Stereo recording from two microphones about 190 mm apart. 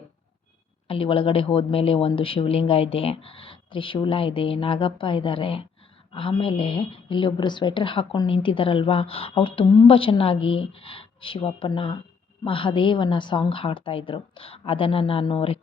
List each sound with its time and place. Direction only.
0.9 s a woman's voice: 30° left (ahead or behind)